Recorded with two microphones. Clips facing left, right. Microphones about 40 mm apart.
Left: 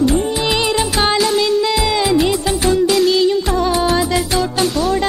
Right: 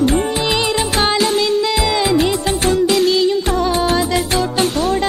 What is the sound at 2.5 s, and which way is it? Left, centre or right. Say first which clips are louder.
Music: even; right.